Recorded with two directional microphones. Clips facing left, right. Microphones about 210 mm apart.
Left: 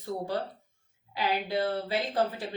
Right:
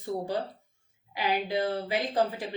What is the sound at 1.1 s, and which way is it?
Speech, 15° right (ahead or behind).